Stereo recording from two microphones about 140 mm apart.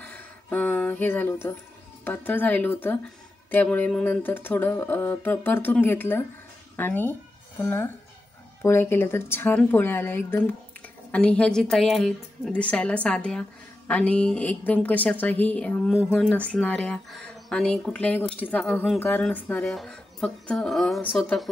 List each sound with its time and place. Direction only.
0.0 s a sound: 10° left (ahead or behind)
2.0 s a woman's voice: 15° left (ahead or behind)
8.6 s a woman's voice: 15° left (ahead or behind)